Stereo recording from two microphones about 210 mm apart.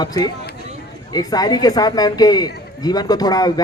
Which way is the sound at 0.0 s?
20° left (ahead or behind).